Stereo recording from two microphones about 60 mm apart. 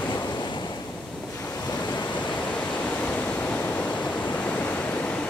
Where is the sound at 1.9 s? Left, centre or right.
Left.